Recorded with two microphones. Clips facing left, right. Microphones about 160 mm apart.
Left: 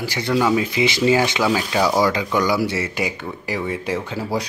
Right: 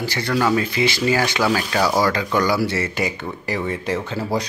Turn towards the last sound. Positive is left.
turn(degrees=10)  # may be behind; listen again after turning